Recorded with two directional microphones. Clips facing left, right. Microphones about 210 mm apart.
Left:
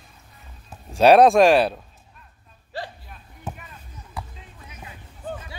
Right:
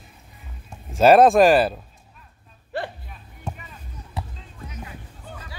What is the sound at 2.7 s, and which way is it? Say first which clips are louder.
Hiccup: right 4 dB; 55° right (ahead or behind).